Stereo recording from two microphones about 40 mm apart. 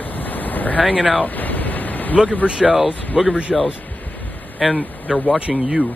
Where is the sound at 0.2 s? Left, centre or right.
Left.